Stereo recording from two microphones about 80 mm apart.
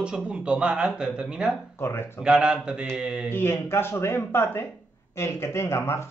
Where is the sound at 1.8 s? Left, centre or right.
Left.